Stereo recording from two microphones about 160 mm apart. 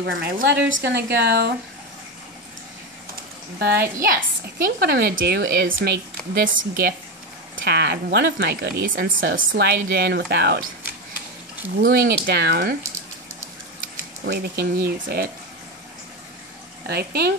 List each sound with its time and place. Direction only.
0.0 s a woman's voice: 70° right (ahead or behind)
3.5 s speech: 85° right
7.5 s speech: 90° right
11.7 s a woman's voice: 80° right
14.2 s a woman's voice: 90° right; by 15.2 s 70° right (ahead or behind)
16.8 s a woman's voice: 85° right